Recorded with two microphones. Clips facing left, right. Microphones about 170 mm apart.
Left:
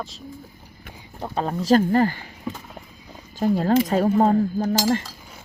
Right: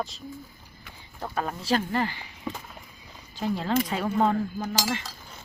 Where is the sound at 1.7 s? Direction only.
45° left (ahead or behind).